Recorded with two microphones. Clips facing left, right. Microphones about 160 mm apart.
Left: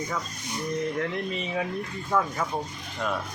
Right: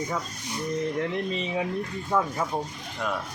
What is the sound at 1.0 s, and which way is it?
Speech, 20° right (ahead or behind).